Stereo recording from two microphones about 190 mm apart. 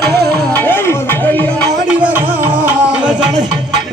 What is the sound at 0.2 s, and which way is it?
Music, 10° left (ahead or behind).